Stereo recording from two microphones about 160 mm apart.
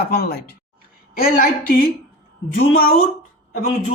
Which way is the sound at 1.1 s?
65° left (ahead or behind).